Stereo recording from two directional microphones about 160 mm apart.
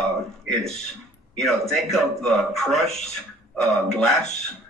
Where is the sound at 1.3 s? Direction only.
Centre (ahead or behind).